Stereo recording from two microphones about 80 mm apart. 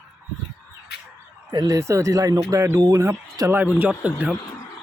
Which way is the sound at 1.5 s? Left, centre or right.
Right.